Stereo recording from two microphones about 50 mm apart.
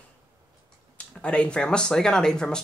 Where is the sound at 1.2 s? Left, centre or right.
Left.